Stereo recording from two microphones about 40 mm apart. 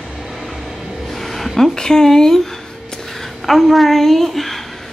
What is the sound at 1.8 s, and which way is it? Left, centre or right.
Speech, centre.